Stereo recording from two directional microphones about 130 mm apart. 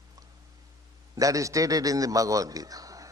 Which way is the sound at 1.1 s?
25° right (ahead or behind).